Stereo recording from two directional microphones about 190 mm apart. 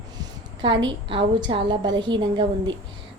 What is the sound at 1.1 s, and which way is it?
A woman's voice, 25° right (ahead or behind).